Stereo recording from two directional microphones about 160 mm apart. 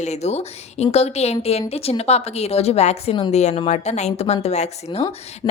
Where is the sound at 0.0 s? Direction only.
45° left (ahead or behind).